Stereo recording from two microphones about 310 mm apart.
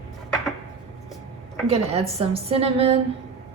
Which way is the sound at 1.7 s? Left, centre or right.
Centre.